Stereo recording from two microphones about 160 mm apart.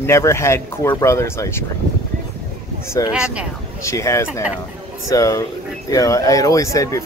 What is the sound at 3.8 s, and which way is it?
Speech, 20° left (ahead or behind).